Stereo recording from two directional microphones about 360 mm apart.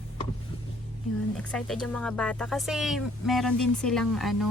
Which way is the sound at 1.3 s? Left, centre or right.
Centre.